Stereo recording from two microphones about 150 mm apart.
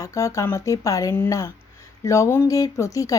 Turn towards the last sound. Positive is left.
turn(degrees=20)  # may be behind; listen again after turning